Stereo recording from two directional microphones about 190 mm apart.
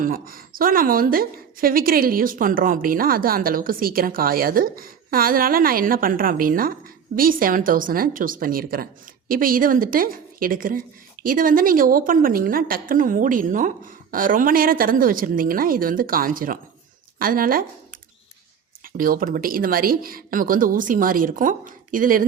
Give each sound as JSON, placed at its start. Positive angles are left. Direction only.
{"t": 0.0, "sound": "a woman's voice", "side_deg": -50}
{"t": 18.8, "sound": "a woman's voice", "side_deg": -50}